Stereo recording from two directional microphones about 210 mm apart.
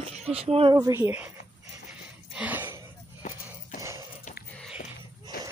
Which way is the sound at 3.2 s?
35° left (ahead or behind).